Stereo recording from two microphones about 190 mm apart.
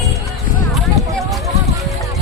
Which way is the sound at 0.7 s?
Centre (ahead or behind).